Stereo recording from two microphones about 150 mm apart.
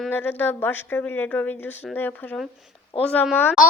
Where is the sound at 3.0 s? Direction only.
10° left (ahead or behind).